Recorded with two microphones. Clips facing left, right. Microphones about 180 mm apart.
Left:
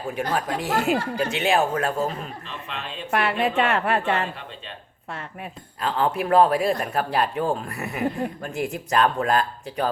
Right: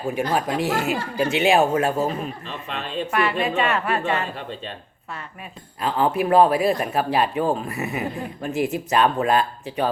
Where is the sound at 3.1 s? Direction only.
55° left (ahead or behind).